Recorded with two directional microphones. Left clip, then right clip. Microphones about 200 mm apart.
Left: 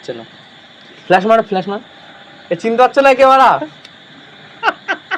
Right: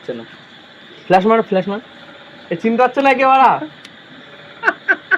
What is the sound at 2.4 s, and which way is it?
Speech, 40° left (ahead or behind).